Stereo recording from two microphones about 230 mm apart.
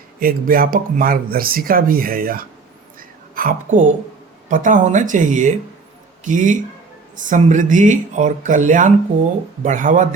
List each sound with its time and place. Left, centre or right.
0.2 s speech: right
3.0 s a sound: right
4.4 s speech: right